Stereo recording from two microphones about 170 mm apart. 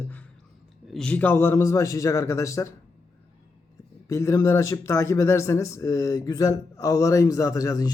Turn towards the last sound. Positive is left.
turn(degrees=20)  # may be behind; listen again after turning